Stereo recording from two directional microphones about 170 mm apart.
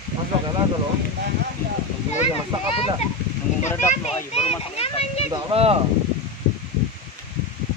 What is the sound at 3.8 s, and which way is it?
A child's voice, 40° left (ahead or behind).